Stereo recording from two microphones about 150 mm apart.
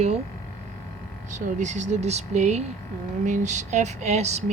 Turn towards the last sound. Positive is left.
turn(degrees=-50)  # may be behind; listen again after turning